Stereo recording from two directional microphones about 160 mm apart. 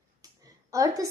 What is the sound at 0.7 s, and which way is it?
Speech, 20° right (ahead or behind).